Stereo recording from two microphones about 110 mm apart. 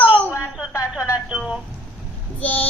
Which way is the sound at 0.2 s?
15° left (ahead or behind).